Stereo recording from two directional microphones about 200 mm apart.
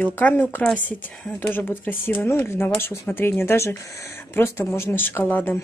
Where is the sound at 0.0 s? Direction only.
10° left (ahead or behind).